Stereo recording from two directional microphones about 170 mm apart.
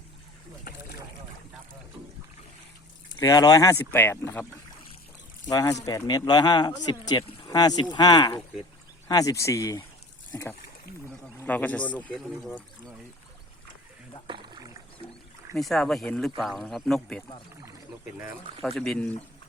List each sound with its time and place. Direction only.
3.2 s speech: 25° left (ahead or behind)
5.8 s speech: 25° left (ahead or behind)
11.3 s speech: 10° left (ahead or behind)
12.2 s speech: centre (ahead or behind)
14.3 s rowboat: 25° right (ahead or behind)
15.5 s speech: centre (ahead or behind)
18.8 s speech: 5° left (ahead or behind)